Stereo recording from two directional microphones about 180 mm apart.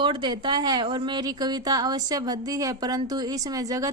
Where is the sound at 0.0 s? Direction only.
25° right (ahead or behind).